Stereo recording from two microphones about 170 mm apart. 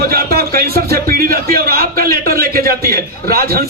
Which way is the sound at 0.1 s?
65° right (ahead or behind).